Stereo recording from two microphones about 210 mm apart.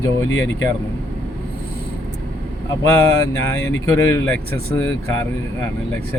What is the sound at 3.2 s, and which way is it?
Speech, 15° left (ahead or behind).